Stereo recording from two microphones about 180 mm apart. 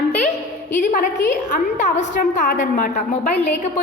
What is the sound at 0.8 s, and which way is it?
A woman's voice, 45° left (ahead or behind).